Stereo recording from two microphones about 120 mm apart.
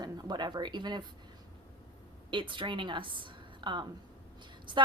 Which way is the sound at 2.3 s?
45° right (ahead or behind).